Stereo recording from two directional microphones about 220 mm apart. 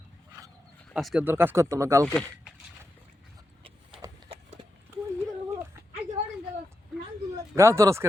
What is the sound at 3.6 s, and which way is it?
Horse, 25° right (ahead or behind).